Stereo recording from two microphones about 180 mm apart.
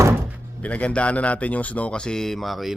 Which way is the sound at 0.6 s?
5° left (ahead or behind).